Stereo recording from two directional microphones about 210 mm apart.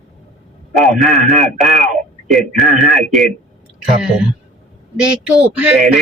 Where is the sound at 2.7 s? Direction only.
35° right (ahead or behind).